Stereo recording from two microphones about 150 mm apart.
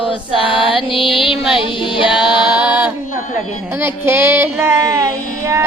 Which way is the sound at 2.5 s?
10° right (ahead or behind).